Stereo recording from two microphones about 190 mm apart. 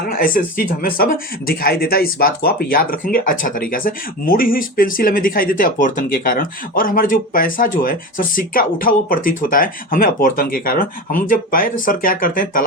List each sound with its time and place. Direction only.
0.0 s speech: 50° left (ahead or behind)